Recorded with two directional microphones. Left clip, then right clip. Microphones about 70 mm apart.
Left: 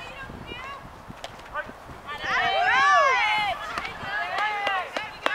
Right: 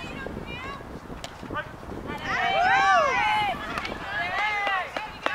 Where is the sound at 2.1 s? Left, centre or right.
Left.